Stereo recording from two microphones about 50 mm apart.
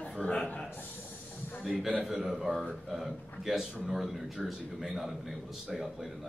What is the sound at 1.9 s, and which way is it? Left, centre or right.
A man's voice, centre.